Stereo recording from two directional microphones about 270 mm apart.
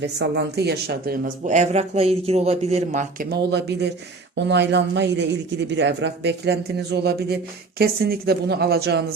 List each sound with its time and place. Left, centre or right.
0.0 s speech: right